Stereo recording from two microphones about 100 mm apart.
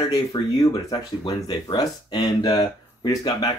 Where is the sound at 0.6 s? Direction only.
40° left (ahead or behind).